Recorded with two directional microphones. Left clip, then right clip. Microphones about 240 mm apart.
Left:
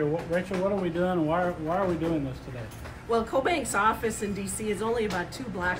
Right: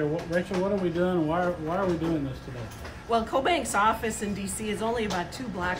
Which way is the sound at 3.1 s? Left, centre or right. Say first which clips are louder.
Right 1 dB; centre.